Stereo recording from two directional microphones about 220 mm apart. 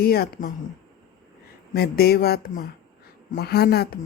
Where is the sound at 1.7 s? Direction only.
45° left (ahead or behind).